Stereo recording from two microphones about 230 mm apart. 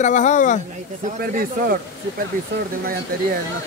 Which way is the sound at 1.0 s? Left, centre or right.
Right.